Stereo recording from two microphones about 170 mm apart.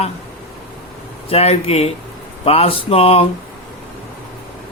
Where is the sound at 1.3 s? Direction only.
35° left (ahead or behind).